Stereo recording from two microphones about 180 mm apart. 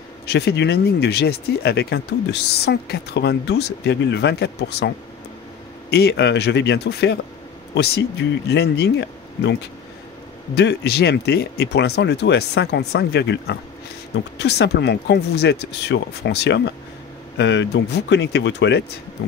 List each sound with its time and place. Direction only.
0.3 s speech: 65° left (ahead or behind)